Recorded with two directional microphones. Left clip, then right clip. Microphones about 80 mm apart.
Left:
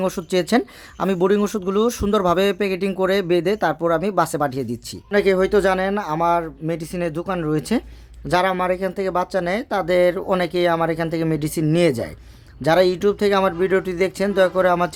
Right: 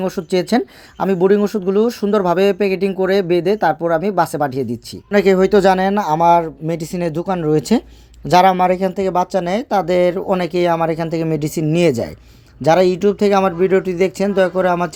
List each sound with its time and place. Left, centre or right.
0.0 s speech: centre
5.1 s speech: right
8.3 s speech: right
9.0 s speech: right